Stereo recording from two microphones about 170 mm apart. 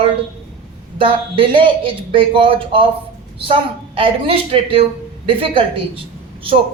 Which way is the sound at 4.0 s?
30° right (ahead or behind).